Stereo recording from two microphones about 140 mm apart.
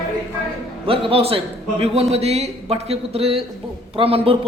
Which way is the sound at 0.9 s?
40° right (ahead or behind).